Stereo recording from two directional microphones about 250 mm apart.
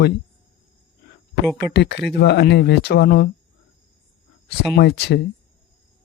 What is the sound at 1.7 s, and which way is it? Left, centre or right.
Speech, left.